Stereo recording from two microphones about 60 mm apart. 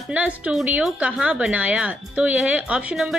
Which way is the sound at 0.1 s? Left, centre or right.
Right.